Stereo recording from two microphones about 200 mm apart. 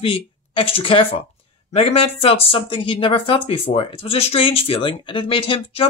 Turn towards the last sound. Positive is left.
turn(degrees=25)  # may be behind; listen again after turning